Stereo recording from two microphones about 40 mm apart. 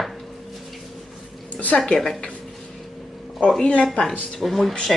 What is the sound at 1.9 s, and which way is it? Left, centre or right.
Speech, centre.